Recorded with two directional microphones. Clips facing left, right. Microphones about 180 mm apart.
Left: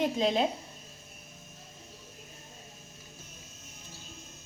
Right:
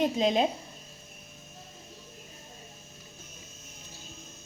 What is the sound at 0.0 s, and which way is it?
Speech, 20° right (ahead or behind).